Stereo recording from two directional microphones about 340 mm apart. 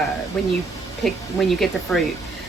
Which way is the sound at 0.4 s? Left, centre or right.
Centre.